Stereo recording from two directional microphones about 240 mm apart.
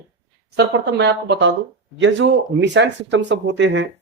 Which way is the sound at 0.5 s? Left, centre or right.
Right.